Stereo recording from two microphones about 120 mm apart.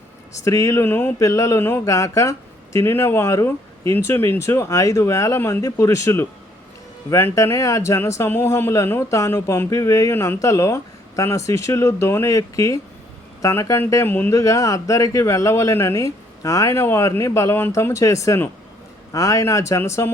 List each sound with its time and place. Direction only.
0.3 s speech: 25° left (ahead or behind)